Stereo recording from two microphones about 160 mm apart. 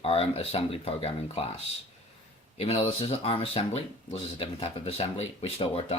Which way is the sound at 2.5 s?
40° left (ahead or behind).